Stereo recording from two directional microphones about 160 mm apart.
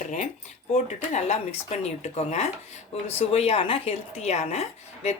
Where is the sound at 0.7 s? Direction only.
45° left (ahead or behind).